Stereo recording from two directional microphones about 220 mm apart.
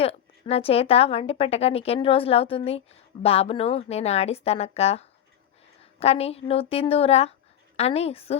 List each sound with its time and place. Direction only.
0.0 s a woman's voice: 25° left (ahead or behind)